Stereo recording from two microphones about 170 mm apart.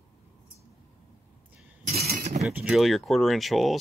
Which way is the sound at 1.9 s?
65° right (ahead or behind).